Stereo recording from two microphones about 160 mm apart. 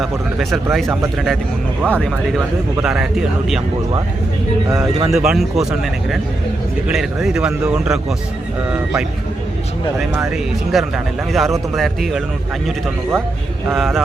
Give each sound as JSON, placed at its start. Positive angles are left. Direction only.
{"t": 0.0, "sound": "speech", "side_deg": 0}
{"t": 1.9, "sound": "speech", "side_deg": 5}
{"t": 5.1, "sound": "speech", "side_deg": -5}
{"t": 6.8, "sound": "a man's voice", "side_deg": 0}
{"t": 10.7, "sound": "speech", "side_deg": 0}
{"t": 13.7, "sound": "speech", "side_deg": 0}